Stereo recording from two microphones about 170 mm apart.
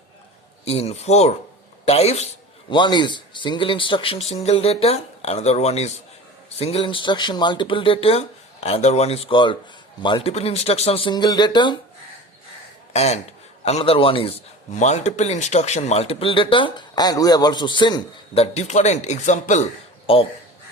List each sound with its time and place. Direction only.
0.6 s a man's voice: 35° left (ahead or behind)
12.9 s a man's voice: 40° left (ahead or behind)
18.5 s speech: 45° left (ahead or behind)
20.1 s a man's voice: 30° left (ahead or behind)